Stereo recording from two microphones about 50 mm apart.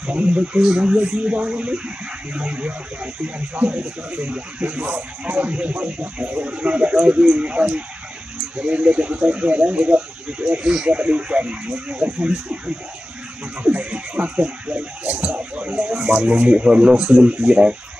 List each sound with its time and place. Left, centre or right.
0.0 s speech: right